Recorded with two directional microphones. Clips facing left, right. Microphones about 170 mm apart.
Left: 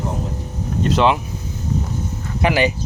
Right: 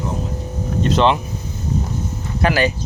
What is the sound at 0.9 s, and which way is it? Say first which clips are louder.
Speech: right 1 dB; 10° left (ahead or behind).